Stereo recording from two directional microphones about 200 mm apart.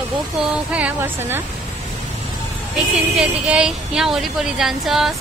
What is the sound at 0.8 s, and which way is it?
Speech, 10° right (ahead or behind).